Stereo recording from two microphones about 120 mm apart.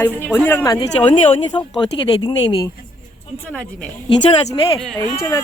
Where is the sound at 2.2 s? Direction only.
35° left (ahead or behind).